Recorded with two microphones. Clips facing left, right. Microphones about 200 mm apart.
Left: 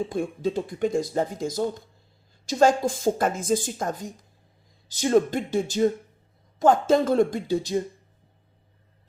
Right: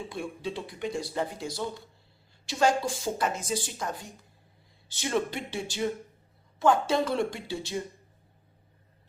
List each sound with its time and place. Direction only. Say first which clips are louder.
0.0 s speech: left 8 dB; 45° left (ahead or behind)